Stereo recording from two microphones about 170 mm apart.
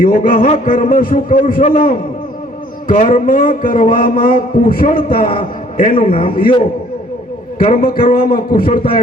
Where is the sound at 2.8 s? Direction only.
50° left (ahead or behind).